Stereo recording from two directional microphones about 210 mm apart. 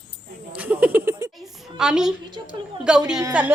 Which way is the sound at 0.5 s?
5° right (ahead or behind).